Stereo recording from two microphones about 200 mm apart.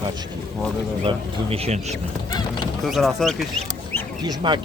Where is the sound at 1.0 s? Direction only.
30° right (ahead or behind).